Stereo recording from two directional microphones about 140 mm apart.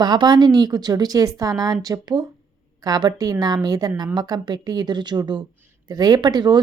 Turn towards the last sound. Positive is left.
turn(degrees=-30)  # may be behind; listen again after turning